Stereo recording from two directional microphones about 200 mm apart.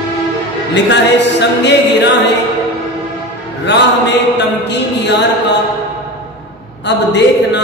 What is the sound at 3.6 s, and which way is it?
Mantra, 60° left (ahead or behind).